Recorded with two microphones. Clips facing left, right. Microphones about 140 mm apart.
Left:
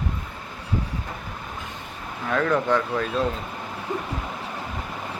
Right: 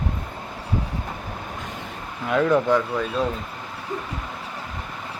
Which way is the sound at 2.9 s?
Centre (ahead or behind).